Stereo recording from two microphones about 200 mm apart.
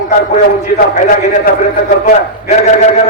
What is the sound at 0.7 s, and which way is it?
A man's voice, 40° left (ahead or behind).